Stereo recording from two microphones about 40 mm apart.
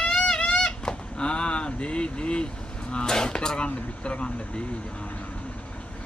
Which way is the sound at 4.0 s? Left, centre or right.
Left.